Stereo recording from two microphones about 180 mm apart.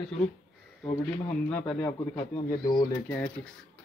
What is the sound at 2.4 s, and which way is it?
Speech, 20° left (ahead or behind).